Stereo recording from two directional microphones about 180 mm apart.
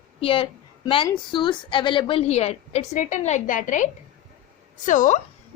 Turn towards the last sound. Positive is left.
turn(degrees=45)  # may be behind; listen again after turning